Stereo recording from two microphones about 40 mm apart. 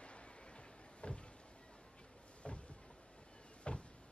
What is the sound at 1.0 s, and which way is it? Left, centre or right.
Vehicle, left.